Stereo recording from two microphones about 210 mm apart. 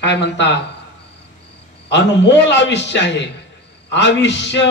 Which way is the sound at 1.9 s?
55° left (ahead or behind).